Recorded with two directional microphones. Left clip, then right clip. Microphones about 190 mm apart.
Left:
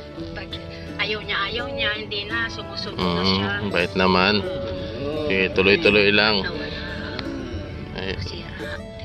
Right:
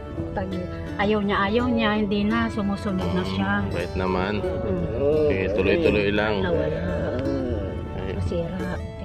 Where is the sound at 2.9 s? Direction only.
Centre (ahead or behind).